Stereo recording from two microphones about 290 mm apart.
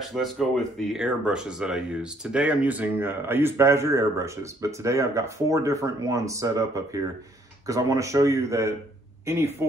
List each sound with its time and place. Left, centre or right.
0.0 s speech: centre